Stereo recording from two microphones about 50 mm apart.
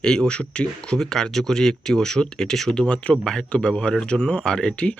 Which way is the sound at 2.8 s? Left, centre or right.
Left.